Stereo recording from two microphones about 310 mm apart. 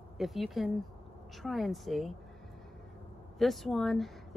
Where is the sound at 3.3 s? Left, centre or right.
Centre.